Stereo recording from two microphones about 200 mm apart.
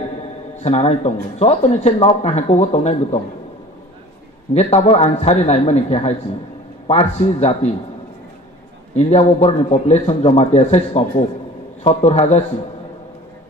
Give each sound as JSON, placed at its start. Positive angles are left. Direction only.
{"t": 0.7, "sound": "speech", "side_deg": 35}
{"t": 4.6, "sound": "speech", "side_deg": 30}
{"t": 8.9, "sound": "speech", "side_deg": 30}